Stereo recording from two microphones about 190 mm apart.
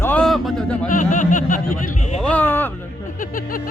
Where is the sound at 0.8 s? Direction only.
45° left (ahead or behind).